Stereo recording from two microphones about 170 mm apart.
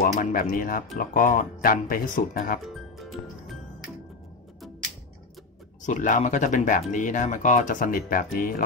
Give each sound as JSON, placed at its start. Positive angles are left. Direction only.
{"t": 0.0, "sound": "speech", "side_deg": 50}
{"t": 2.6, "sound": "music", "side_deg": 0}
{"t": 5.9, "sound": "speech", "side_deg": 50}